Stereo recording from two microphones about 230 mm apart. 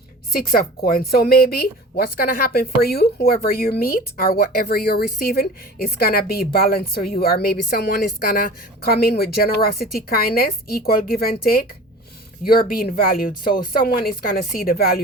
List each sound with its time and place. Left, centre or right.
0.3 s a woman's voice: left